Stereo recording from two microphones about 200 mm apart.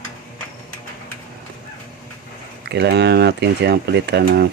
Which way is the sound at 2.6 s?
55° right (ahead or behind).